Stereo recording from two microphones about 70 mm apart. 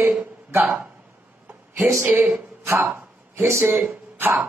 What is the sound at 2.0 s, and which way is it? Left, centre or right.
Speech, right.